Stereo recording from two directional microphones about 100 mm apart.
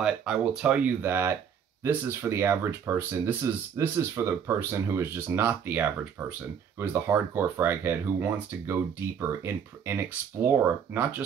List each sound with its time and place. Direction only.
0.0 s speech: 5° right (ahead or behind)